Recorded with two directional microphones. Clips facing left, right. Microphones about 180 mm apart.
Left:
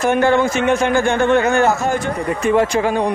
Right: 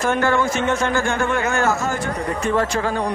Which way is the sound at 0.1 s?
20° left (ahead or behind).